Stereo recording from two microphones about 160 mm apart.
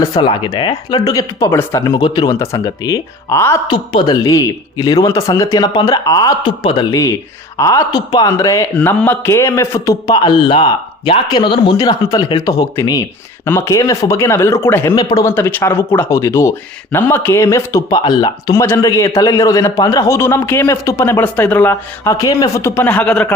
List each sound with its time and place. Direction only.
0.0 s a man's voice: 25° left (ahead or behind)
1.9 s a man's voice: 30° left (ahead or behind)
3.7 s a man's voice: 30° left (ahead or behind); by 23.3 s 5° left (ahead or behind)